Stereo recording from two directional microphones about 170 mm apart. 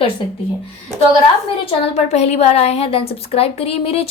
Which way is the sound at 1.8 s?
40° left (ahead or behind).